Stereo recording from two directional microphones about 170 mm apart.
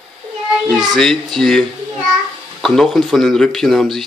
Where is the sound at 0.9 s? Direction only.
Centre (ahead or behind).